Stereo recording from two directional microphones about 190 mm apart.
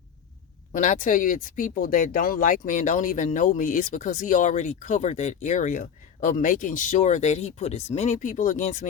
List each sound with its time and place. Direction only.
0.7 s speech: 45° left (ahead or behind)